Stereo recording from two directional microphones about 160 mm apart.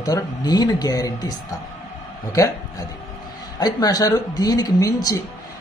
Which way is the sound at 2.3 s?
20° left (ahead or behind).